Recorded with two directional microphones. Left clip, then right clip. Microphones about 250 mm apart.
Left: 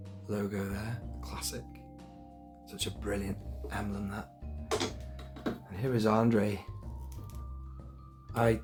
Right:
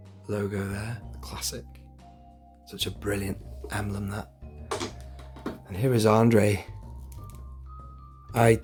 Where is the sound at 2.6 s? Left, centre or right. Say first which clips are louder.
Right 6 dB; right.